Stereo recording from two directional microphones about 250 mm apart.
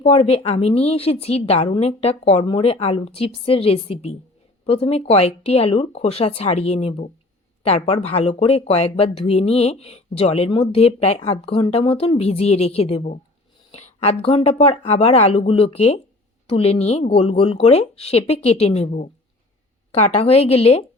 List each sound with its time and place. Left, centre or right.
0.0 s speech: left